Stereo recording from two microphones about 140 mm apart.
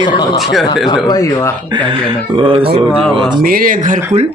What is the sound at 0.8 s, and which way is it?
Speech, 25° left (ahead or behind).